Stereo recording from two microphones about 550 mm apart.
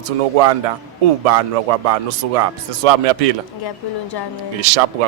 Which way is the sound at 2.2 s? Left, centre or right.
Right.